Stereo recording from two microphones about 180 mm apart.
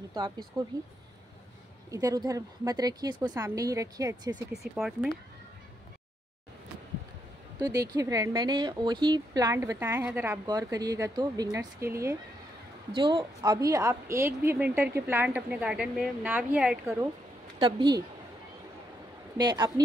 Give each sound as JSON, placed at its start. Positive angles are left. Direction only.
{"t": 0.6, "sound": "speech", "side_deg": -20}
{"t": 1.9, "sound": "speech", "side_deg": -20}
{"t": 4.5, "sound": "speech", "side_deg": 0}
{"t": 7.6, "sound": "speech", "side_deg": -20}
{"t": 10.4, "sound": "a woman's voice", "side_deg": -20}
{"t": 12.9, "sound": "a woman's voice", "side_deg": -25}
{"t": 17.6, "sound": "speech", "side_deg": -25}
{"t": 19.3, "sound": "speech", "side_deg": -25}